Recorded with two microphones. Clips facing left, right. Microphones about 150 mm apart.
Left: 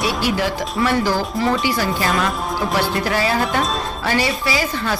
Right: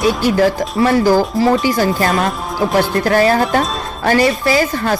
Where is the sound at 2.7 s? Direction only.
45° right (ahead or behind).